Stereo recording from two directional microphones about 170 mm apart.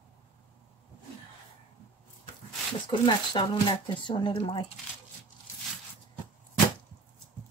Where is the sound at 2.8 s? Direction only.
30° left (ahead or behind).